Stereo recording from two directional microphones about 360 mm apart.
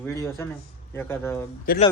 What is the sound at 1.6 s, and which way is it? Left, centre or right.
Speech, left.